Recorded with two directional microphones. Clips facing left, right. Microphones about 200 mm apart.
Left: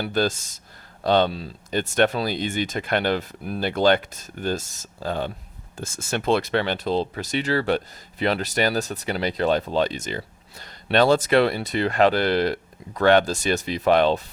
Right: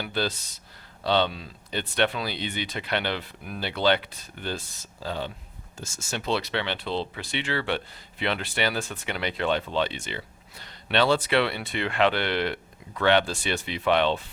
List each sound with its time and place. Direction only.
0.0 s speech: 45° left (ahead or behind)